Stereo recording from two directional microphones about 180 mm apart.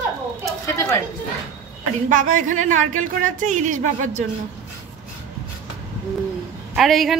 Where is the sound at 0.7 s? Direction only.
15° left (ahead or behind).